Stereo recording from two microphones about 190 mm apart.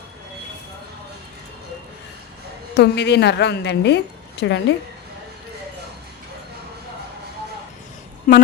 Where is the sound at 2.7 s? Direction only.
65° left (ahead or behind).